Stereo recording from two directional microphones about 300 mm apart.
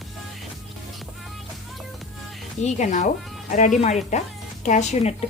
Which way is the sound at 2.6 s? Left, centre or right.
Left.